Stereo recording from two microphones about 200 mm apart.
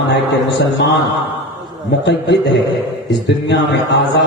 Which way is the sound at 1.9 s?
60° left (ahead or behind).